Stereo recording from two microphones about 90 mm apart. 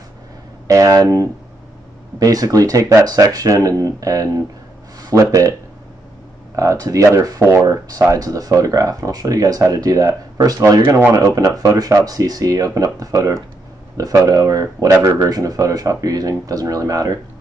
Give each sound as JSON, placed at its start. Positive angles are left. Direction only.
{"t": 0.7, "sound": "speech", "side_deg": -40}
{"t": 6.5, "sound": "speech", "side_deg": -40}